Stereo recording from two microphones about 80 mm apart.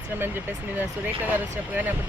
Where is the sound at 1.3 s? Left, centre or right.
Right.